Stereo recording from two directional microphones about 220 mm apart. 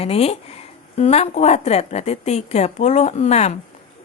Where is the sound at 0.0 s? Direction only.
25° left (ahead or behind).